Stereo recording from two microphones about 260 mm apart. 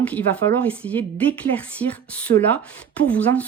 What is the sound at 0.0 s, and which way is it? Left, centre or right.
A woman's voice, centre.